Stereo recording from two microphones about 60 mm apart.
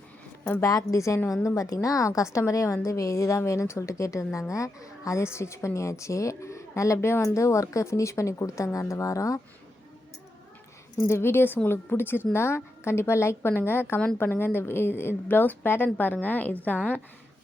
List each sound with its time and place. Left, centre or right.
0.6 s a woman's voice: left
11.1 s a woman's voice: left